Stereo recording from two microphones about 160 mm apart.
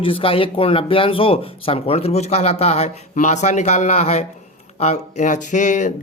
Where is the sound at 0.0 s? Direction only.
35° left (ahead or behind).